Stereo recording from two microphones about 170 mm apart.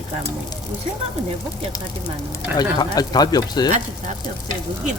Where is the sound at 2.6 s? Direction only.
25° left (ahead or behind).